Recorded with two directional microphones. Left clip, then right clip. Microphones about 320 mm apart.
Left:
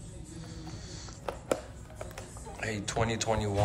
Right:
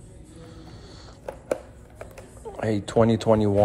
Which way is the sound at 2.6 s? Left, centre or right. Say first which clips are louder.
Right 11 dB; centre.